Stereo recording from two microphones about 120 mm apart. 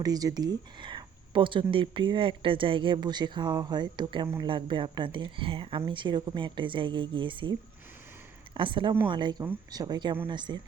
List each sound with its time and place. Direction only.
0.0 s speech: 30° right (ahead or behind)
8.5 s speech: 45° right (ahead or behind)